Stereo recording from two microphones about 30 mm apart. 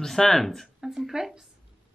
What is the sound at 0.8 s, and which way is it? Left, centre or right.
Speech, centre.